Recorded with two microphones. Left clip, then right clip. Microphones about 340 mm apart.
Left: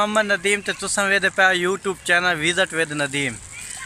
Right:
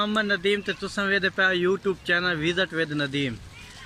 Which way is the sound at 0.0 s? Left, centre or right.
Centre.